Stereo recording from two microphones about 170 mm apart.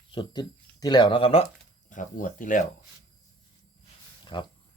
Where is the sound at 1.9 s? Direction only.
50° left (ahead or behind).